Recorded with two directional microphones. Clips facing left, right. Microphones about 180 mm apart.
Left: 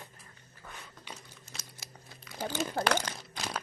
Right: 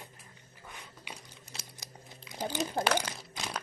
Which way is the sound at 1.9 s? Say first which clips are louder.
Right 1 dB; 20° right (ahead or behind).